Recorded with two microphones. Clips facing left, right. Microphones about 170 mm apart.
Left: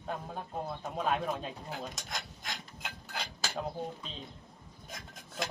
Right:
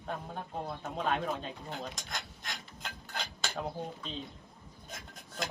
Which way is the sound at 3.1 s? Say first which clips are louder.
Even; 5° left (ahead or behind).